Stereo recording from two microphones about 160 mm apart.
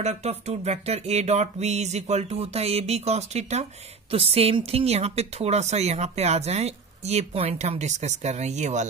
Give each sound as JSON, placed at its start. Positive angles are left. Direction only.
{"t": 0.0, "sound": "a woman's voice", "side_deg": -45}